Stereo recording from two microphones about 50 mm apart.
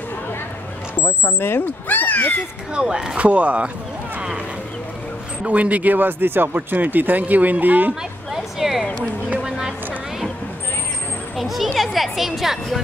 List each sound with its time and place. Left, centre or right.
1.0 s speech: left
2.7 s speech: centre
3.2 s speech: right
5.4 s speech: right
8.3 s a sound: centre
11.3 s speech: centre